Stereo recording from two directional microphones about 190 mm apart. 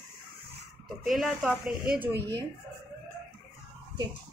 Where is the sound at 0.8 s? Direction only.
Centre (ahead or behind).